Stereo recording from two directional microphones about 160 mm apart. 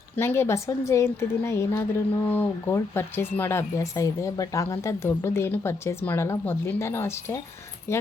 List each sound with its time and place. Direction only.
0.2 s a woman's voice: 15° left (ahead or behind)